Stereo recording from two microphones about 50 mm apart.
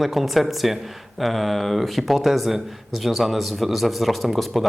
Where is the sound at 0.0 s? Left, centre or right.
Centre.